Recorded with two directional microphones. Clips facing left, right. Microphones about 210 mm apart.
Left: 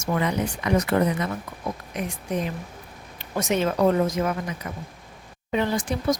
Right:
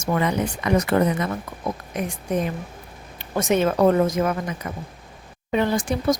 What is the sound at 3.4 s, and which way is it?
Speech, 50° right (ahead or behind).